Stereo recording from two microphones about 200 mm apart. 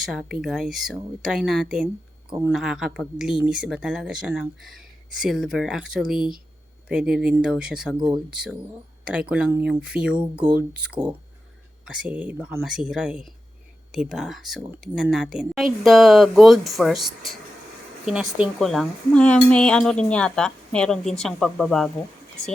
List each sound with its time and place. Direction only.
0.0 s speech: centre (ahead or behind)
7.9 s speech: 25° right (ahead or behind)
9.3 s speech: 10° right (ahead or behind)
11.9 s speech: 5° right (ahead or behind)